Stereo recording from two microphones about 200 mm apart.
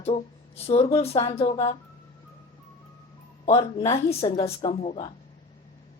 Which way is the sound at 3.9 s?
25° left (ahead or behind).